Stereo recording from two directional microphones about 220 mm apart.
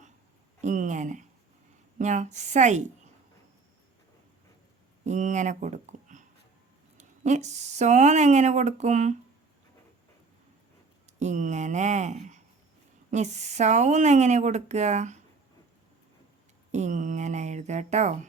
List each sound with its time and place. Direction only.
0.6 s speech: 35° right (ahead or behind)
5.0 s speech: 35° right (ahead or behind)
11.2 s speech: 35° right (ahead or behind)
16.7 s speech: 35° right (ahead or behind)